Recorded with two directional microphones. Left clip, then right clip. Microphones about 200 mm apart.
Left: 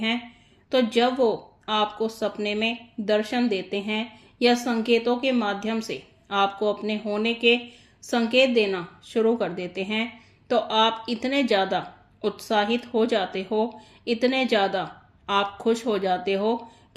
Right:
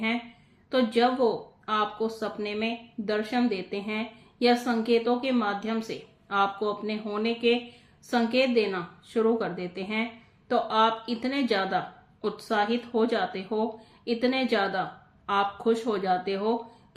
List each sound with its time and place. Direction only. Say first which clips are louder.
0.7 s speech: left 2 dB; 35° left (ahead or behind)